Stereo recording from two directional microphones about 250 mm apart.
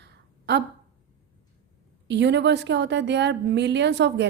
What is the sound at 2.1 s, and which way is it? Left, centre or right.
A woman's voice, right.